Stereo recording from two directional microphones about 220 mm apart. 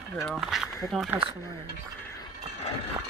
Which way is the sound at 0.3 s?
Centre (ahead or behind).